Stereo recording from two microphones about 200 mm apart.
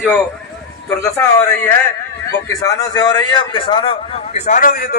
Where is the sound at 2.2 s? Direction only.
15° left (ahead or behind).